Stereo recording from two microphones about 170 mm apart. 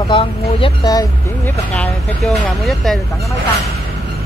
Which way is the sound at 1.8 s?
Centre (ahead or behind).